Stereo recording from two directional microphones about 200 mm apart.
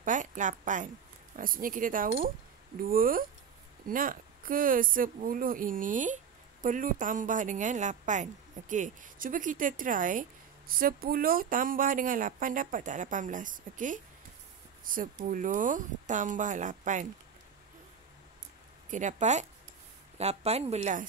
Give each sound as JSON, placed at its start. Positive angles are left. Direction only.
{"t": 0.0, "sound": "a woman's voice", "side_deg": -40}
{"t": 18.9, "sound": "speech", "side_deg": -40}